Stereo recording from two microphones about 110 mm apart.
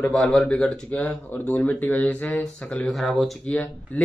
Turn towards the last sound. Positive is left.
turn(degrees=15)  # may be behind; listen again after turning